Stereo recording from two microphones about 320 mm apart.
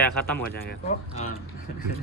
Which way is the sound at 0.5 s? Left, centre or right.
Left.